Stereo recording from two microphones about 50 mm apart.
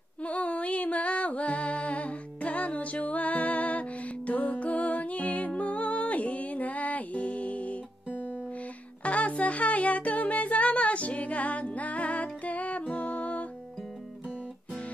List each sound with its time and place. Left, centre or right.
0.2 s music: left
8.1 s guitar: left
9.0 s music: left